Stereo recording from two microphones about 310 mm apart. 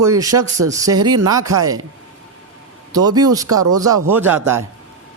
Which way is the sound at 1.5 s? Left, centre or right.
Right.